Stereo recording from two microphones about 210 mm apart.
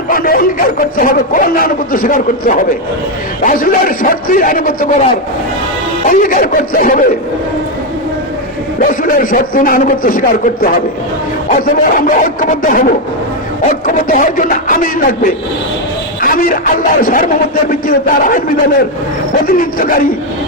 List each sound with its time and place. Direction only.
0.1 s speech: 45° left (ahead or behind)
6.1 s speech: 40° left (ahead or behind)
8.8 s speech: 40° left (ahead or behind)